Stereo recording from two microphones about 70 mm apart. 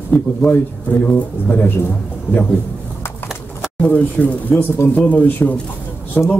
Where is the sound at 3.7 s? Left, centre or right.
Left.